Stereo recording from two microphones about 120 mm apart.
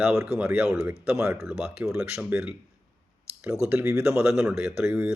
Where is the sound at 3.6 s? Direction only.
15° right (ahead or behind).